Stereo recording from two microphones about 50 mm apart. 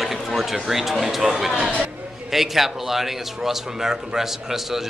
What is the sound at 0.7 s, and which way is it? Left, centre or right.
A man's voice, centre.